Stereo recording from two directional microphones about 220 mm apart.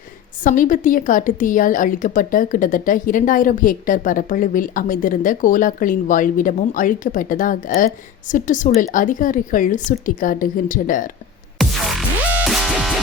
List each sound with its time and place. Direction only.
0.4 s a woman's voice: 35° left (ahead or behind)
11.5 s music: centre (ahead or behind)